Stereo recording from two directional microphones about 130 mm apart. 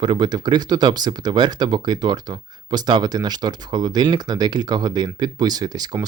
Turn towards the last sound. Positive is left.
turn(degrees=-30)  # may be behind; listen again after turning